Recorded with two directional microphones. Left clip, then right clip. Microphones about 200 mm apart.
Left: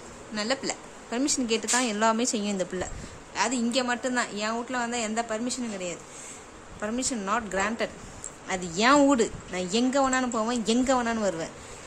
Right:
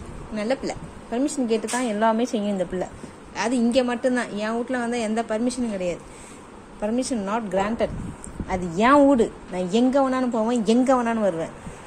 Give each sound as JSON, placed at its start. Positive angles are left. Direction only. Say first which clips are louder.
{"t": 0.3, "sound": "a woman's voice", "louder": "right 3 dB", "side_deg": 5}
{"t": 1.7, "sound": "a woman's voice", "louder": "even", "side_deg": 20}
{"t": 3.3, "sound": "a woman's voice", "louder": "right 5 dB", "side_deg": 0}
{"t": 9.7, "sound": "a woman's voice", "louder": "right 4 dB", "side_deg": 0}
{"t": 10.5, "sound": "a woman's voice", "louder": "right 6 dB", "side_deg": -5}